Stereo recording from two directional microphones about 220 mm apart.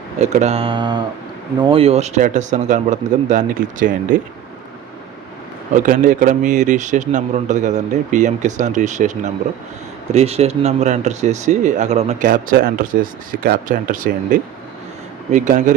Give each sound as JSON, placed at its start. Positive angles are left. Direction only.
{"t": 0.2, "sound": "speech", "side_deg": -30}
{"t": 5.8, "sound": "speech", "side_deg": -35}